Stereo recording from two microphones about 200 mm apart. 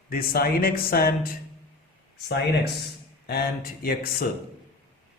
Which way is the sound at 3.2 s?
50° left (ahead or behind).